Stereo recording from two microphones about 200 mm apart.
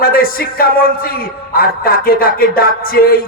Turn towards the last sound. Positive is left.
turn(degrees=50)  # may be behind; listen again after turning